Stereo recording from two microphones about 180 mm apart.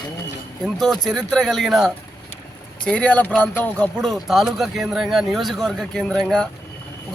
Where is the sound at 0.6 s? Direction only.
Centre (ahead or behind).